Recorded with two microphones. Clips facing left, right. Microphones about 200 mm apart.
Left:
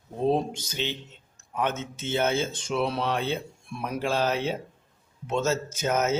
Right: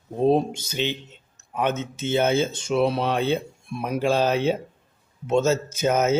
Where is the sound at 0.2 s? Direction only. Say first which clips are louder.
Right 5 dB; 15° right (ahead or behind).